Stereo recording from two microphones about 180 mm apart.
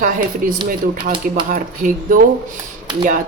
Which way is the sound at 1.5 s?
50° right (ahead or behind).